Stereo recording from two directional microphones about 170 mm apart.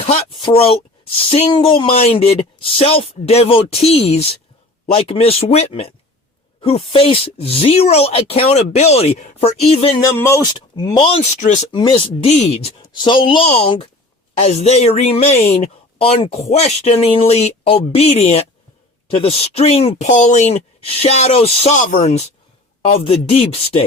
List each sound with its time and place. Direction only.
0.0 s speech: 40° left (ahead or behind)
10.1 s speech: 15° left (ahead or behind)
10.8 s speech: 30° left (ahead or behind)
11.3 s speech: 45° left (ahead or behind)
11.7 s speech: 25° left (ahead or behind)